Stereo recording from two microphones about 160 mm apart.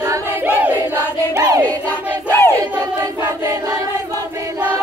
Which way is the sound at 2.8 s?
20° right (ahead or behind).